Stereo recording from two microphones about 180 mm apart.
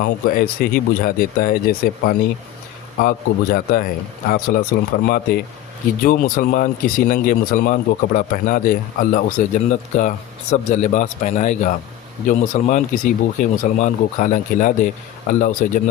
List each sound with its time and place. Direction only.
0.0 s speech: 55° left (ahead or behind)